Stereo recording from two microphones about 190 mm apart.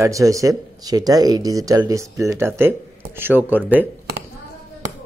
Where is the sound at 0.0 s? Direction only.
15° right (ahead or behind).